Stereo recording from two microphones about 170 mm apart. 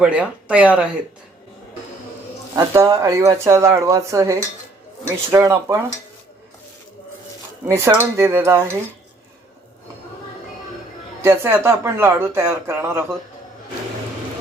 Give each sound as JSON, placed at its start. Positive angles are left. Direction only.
{"t": 0.0, "sound": "speech", "side_deg": -5}
{"t": 2.6, "sound": "speech", "side_deg": -20}
{"t": 7.7, "sound": "speech", "side_deg": -15}
{"t": 11.2, "sound": "speech", "side_deg": -15}